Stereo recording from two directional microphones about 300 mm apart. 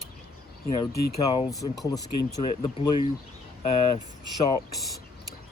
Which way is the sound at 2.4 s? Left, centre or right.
Centre.